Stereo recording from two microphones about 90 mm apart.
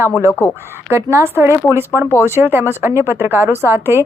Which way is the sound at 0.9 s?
30° right (ahead or behind).